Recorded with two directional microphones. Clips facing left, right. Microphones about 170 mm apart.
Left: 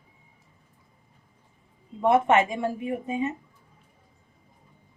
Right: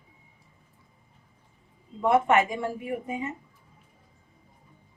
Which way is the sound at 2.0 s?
25° left (ahead or behind).